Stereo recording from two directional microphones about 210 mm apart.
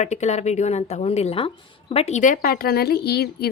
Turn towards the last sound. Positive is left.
turn(degrees=50)  # may be behind; listen again after turning